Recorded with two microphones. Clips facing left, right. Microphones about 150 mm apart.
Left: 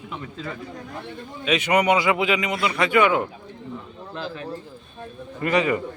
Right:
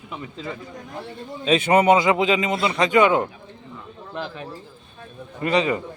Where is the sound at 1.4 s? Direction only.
30° right (ahead or behind).